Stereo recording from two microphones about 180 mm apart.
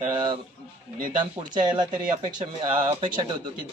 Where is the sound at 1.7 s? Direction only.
25° right (ahead or behind).